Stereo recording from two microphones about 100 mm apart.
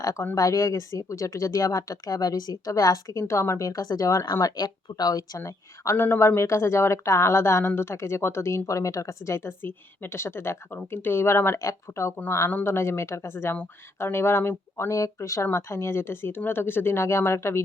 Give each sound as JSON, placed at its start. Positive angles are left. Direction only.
{"t": 0.0, "sound": "speech", "side_deg": 35}
{"t": 5.4, "sound": "speech", "side_deg": 30}